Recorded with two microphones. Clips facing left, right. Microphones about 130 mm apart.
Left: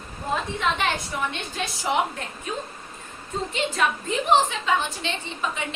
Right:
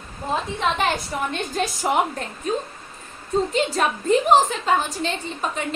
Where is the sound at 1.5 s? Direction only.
45° right (ahead or behind).